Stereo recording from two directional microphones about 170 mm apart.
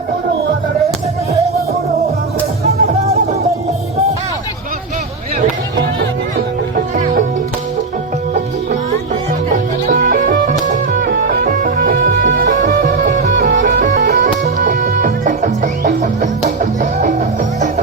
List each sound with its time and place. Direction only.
2.6 s music: 40° right (ahead or behind)
9.5 s music: 50° right (ahead or behind)